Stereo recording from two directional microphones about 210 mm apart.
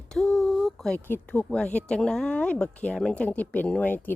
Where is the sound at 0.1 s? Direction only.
5° left (ahead or behind).